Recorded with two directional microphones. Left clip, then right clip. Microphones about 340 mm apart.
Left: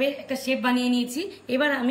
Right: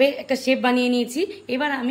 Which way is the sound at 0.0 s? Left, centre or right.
Centre.